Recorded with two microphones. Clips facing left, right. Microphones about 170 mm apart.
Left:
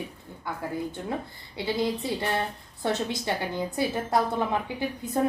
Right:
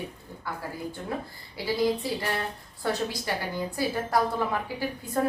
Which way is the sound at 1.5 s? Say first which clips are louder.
Right 1 dB; 25° left (ahead or behind).